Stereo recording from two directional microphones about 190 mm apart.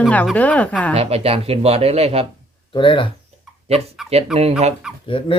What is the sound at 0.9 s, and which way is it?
Speech, 30° right (ahead or behind).